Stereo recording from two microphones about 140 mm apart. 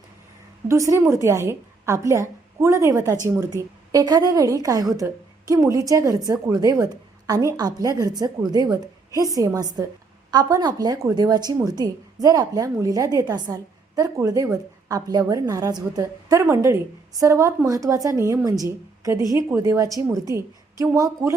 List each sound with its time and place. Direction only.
0.7 s a woman's voice: 20° right (ahead or behind)